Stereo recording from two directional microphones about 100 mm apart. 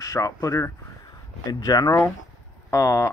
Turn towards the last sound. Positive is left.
turn(degrees=30)  # may be behind; listen again after turning